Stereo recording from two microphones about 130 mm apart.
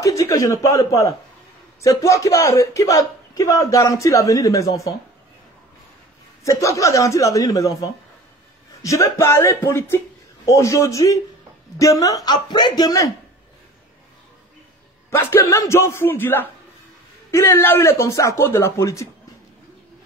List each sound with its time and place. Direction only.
0.0 s a man's voice: 25° left (ahead or behind)
6.4 s a man's voice: 25° left (ahead or behind)
15.0 s a man's voice: 20° left (ahead or behind)